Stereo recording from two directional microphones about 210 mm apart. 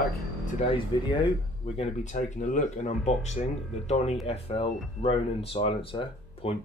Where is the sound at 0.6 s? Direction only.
25° left (ahead or behind).